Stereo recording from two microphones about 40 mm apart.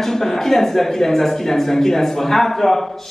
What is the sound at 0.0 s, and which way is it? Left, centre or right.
Speech, centre.